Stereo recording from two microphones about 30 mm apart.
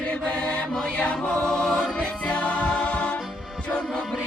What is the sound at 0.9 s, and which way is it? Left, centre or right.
Music, left.